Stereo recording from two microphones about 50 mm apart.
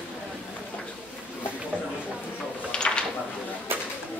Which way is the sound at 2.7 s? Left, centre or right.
Centre.